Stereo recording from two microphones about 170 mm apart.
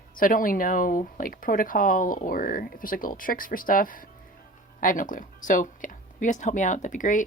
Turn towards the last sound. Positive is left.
turn(degrees=50)  # may be behind; listen again after turning